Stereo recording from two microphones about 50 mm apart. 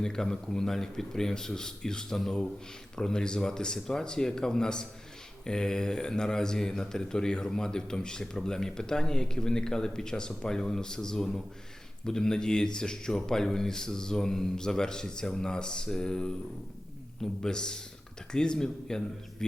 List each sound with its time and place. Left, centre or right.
0.0 s speech: centre
17.4 s speech: centre